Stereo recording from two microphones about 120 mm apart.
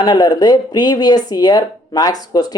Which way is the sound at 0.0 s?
35° left (ahead or behind).